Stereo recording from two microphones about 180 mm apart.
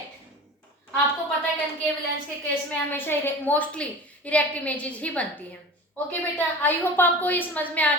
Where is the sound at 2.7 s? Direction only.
10° left (ahead or behind).